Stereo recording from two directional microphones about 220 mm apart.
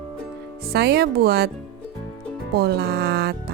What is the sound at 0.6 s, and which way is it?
Music, 45° right (ahead or behind).